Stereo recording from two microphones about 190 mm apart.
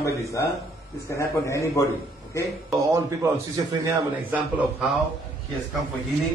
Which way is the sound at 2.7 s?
15° right (ahead or behind).